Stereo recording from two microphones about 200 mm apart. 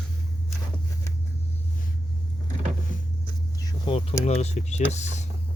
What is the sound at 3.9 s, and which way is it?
Speech, 30° left (ahead or behind).